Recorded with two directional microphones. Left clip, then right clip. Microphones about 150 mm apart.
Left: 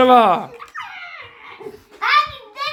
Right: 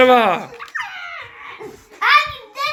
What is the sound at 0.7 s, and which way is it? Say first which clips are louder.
Dog: right 6 dB; 70° left (ahead or behind).